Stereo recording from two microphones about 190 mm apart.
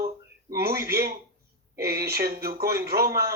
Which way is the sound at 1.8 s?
55° right (ahead or behind).